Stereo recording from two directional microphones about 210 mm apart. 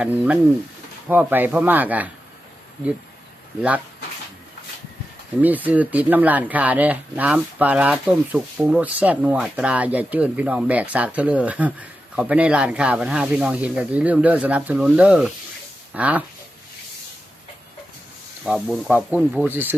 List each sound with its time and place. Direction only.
0.0 s speech: 5° right (ahead or behind)
5.4 s speech: 10° right (ahead or behind)
18.4 s speech: centre (ahead or behind)